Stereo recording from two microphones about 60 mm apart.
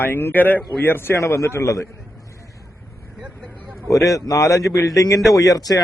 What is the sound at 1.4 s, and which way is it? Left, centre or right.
Speech, left.